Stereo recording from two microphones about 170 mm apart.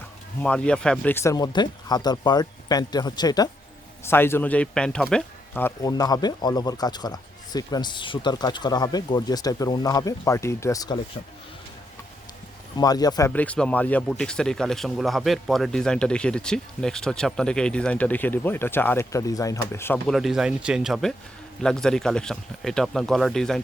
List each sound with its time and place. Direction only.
0.4 s speech: 5° left (ahead or behind); by 11.0 s 25° left (ahead or behind)
12.7 s speech: 20° left (ahead or behind)
13.3 s speech: 10° left (ahead or behind)
20.1 s speech: centre (ahead or behind)